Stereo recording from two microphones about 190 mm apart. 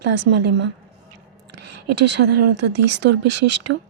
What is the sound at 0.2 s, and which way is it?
Speech, 65° right (ahead or behind).